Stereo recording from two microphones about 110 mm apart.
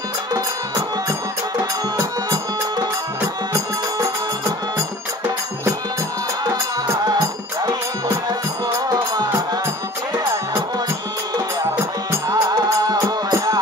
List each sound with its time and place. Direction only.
3.5 s music: 30° right (ahead or behind)
7.1 s music: 40° right (ahead or behind)
8.8 s music: 35° right (ahead or behind)
12.1 s music: 30° right (ahead or behind)